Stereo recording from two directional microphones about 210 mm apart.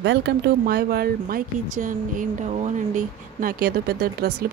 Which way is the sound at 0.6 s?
45° right (ahead or behind).